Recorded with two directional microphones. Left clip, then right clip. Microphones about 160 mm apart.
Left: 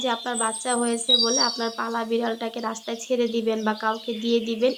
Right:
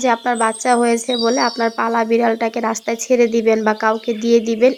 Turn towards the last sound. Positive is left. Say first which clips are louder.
# right 9 dB
turn(degrees=-40)  # may be behind; listen again after turning